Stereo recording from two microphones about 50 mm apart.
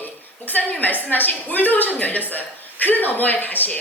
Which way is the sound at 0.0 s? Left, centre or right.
Left.